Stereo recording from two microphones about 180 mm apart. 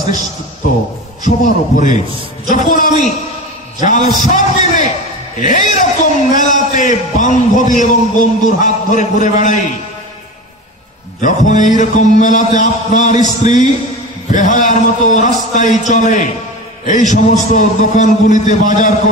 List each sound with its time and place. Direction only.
1.2 s music: 45° left (ahead or behind)
11.1 s music: 45° left (ahead or behind)